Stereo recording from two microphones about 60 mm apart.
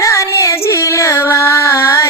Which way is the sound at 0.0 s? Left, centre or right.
Left.